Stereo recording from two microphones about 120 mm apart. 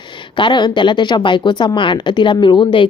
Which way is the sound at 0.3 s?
40° left (ahead or behind).